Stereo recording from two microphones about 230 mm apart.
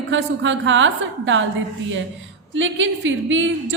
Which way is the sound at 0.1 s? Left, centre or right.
Right.